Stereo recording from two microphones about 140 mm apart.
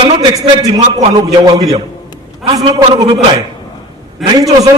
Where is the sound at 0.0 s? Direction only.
30° right (ahead or behind).